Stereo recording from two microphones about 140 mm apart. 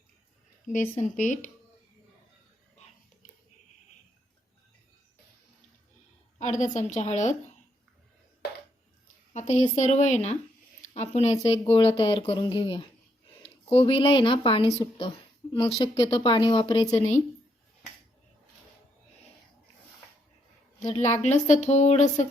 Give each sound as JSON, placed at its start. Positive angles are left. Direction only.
{"t": 0.7, "sound": "a woman's voice", "side_deg": 60}
{"t": 6.4, "sound": "a woman's voice", "side_deg": 60}
{"t": 9.3, "sound": "a woman's voice", "side_deg": 55}
{"t": 11.7, "sound": "speech", "side_deg": 40}
{"t": 16.9, "sound": "a woman's voice", "side_deg": 55}
{"t": 21.0, "sound": "a woman's voice", "side_deg": 55}